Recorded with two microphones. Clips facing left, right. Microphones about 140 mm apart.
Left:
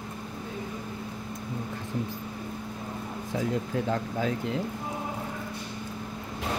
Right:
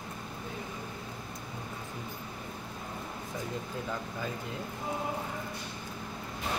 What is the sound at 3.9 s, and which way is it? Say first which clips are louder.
Speech: left 8 dB; 75° left (ahead or behind).